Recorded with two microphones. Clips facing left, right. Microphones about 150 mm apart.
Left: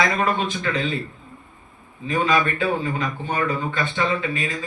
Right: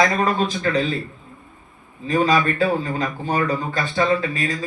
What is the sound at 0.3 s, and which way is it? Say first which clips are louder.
Speech: right 4 dB; 40° right (ahead or behind).